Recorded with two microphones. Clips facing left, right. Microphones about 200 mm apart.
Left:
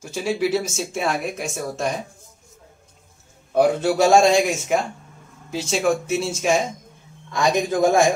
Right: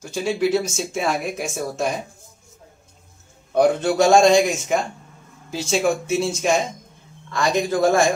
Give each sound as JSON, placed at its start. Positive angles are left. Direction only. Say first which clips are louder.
{"t": 0.0, "sound": "speech", "louder": "right 1 dB", "side_deg": 5}
{"t": 3.5, "sound": "speech", "louder": "right 1 dB", "side_deg": 5}
{"t": 7.2, "sound": "speech", "louder": "left 1 dB", "side_deg": 15}